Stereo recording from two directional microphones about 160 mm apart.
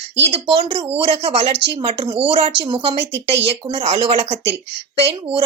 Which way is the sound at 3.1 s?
90° right.